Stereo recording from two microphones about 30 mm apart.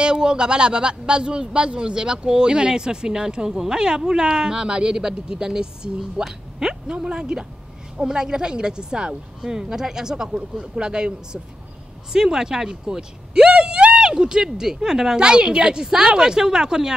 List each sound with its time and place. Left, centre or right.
0.0 s a man's voice: right
14.2 s a man's voice: right
15.1 s a man's voice: right